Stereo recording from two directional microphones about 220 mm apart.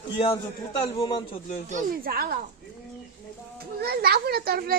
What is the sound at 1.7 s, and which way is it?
Speech, 40° right (ahead or behind).